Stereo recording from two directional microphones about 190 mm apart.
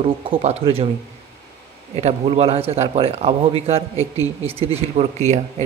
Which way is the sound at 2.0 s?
35° right (ahead or behind).